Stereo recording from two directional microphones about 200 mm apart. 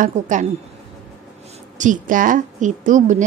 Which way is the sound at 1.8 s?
40° right (ahead or behind).